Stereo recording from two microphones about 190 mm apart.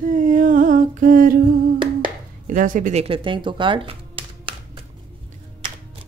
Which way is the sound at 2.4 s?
45° right (ahead or behind).